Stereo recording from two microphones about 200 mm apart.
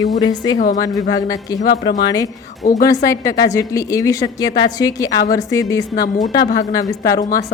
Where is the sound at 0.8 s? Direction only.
20° left (ahead or behind).